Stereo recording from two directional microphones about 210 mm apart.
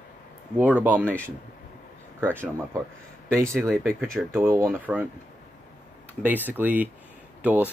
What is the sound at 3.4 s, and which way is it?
Speech, 15° right (ahead or behind).